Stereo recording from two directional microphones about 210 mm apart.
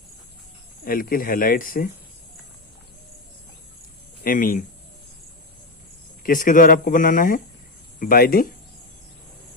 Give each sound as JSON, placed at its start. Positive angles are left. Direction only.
{"t": 0.9, "sound": "speech", "side_deg": 45}
{"t": 4.2, "sound": "speech", "side_deg": 40}
{"t": 6.2, "sound": "speech", "side_deg": 40}